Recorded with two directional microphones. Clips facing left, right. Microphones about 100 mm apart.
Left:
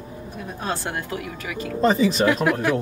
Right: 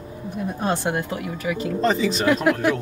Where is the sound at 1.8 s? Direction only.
10° left (ahead or behind).